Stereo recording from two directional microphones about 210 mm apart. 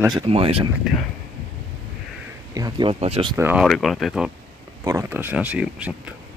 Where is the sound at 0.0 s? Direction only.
25° right (ahead or behind).